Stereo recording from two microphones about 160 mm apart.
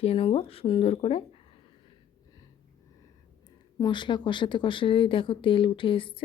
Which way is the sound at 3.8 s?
30° left (ahead or behind).